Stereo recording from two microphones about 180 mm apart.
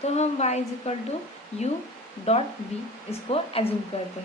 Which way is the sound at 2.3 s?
35° left (ahead or behind).